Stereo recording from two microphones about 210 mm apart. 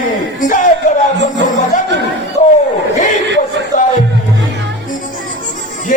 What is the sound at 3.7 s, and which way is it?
Music, 35° left (ahead or behind).